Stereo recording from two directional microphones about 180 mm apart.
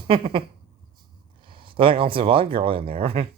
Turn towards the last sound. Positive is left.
turn(degrees=-30)  # may be behind; listen again after turning